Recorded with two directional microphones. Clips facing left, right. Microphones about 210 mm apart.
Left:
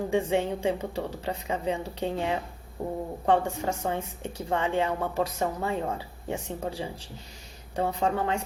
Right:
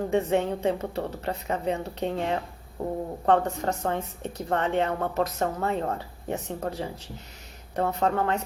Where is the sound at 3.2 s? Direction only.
10° left (ahead or behind).